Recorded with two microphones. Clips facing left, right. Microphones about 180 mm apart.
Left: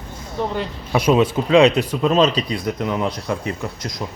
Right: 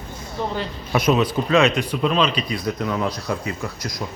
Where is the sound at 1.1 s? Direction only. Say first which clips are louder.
Left 7 dB; 25° left (ahead or behind).